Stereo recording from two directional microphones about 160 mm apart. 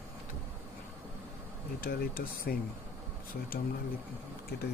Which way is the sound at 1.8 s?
65° left (ahead or behind).